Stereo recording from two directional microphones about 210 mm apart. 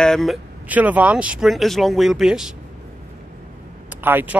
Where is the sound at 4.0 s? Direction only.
10° right (ahead or behind).